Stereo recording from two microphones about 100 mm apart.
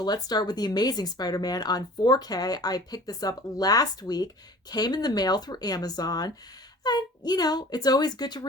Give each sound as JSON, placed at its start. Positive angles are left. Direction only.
{"t": 0.0, "sound": "a child's voice", "side_deg": 40}